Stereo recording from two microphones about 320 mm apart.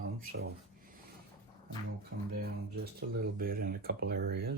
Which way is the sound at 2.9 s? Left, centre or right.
Right.